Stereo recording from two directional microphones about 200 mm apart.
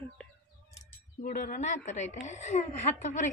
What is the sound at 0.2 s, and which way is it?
Bird, 5° left (ahead or behind).